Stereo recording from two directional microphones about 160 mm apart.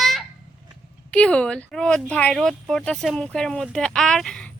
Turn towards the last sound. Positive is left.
turn(degrees=5)  # may be behind; listen again after turning